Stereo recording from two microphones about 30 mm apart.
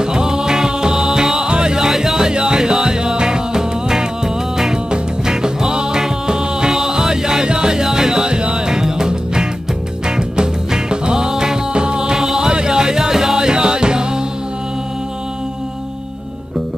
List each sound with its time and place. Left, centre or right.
0.0 s music: right
1.5 s music: right
1.9 s music: centre
5.2 s music: right